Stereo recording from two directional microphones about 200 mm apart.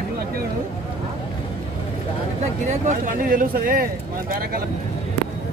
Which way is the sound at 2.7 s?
40° right (ahead or behind).